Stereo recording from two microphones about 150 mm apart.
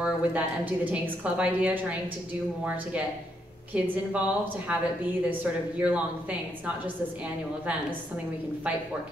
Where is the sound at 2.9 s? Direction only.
10° right (ahead or behind).